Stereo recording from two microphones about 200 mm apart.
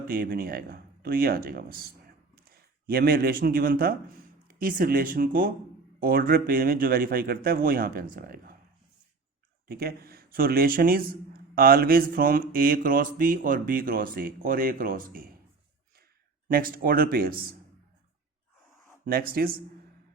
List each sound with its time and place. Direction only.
0.1 s speech: 45° right (ahead or behind)
9.6 s speech: 50° right (ahead or behind)
16.5 s speech: 45° right (ahead or behind)
19.0 s speech: 50° right (ahead or behind)